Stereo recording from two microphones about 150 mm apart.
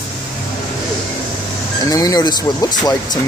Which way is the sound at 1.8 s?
25° left (ahead or behind).